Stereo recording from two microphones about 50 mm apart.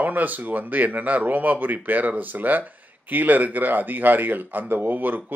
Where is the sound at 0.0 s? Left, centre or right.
Right.